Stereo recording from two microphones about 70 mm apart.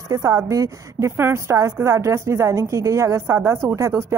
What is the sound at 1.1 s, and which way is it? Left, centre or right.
A woman's voice, right.